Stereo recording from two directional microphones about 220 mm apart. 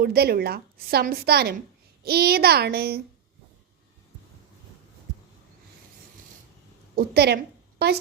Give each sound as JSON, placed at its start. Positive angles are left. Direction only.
{"t": 0.0, "sound": "a woman's voice", "side_deg": -45}
{"t": 6.9, "sound": "a woman's voice", "side_deg": -45}